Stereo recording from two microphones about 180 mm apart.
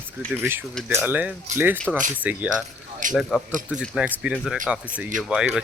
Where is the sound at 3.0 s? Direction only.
45° right (ahead or behind).